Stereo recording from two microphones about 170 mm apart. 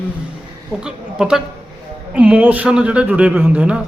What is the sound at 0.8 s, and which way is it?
A man's voice, 5° right (ahead or behind).